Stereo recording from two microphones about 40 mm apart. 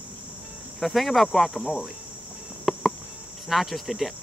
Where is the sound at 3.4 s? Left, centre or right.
Centre.